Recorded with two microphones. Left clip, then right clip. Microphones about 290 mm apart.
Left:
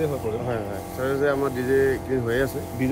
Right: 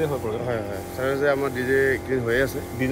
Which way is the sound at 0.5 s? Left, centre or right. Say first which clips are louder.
Right 1 dB; centre.